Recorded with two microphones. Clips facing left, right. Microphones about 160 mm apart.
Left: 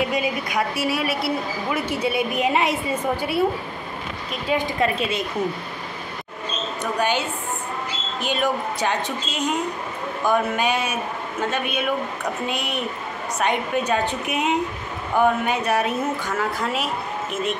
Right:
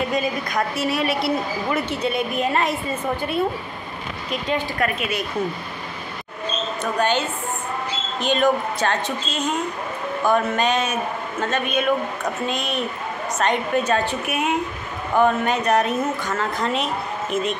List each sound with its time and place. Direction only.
0.1 s a woman's voice: 10° left (ahead or behind)
4.7 s a woman's voice: 25° left (ahead or behind)
6.8 s a woman's voice: 10° left (ahead or behind)